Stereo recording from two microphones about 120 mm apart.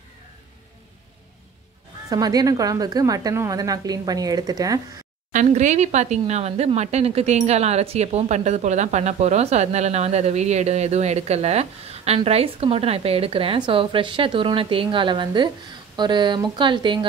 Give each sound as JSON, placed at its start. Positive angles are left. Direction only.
{"t": 2.0, "sound": "a woman's voice", "side_deg": -30}
{"t": 5.3, "sound": "a woman's voice", "side_deg": -90}